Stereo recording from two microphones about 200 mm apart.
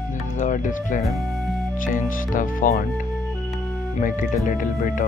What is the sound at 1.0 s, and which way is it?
Speech, centre (ahead or behind).